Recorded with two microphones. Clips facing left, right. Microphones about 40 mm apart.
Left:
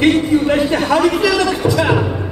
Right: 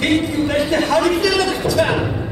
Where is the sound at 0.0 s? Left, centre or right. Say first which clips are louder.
Left 4 dB; centre.